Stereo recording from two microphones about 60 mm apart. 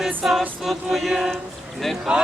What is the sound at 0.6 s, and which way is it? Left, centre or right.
Chant, centre.